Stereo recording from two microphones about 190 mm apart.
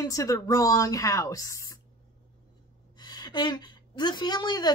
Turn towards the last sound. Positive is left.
turn(degrees=20)  # may be behind; listen again after turning